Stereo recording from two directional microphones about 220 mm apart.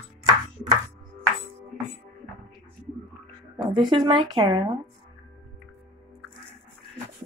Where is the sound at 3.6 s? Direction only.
20° right (ahead or behind).